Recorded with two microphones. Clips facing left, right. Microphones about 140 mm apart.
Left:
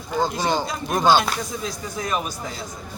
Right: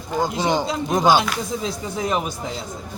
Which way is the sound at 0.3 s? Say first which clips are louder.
Right 2 dB; 20° right (ahead or behind).